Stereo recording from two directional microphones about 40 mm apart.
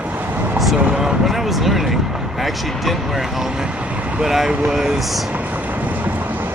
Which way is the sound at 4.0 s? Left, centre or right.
Right.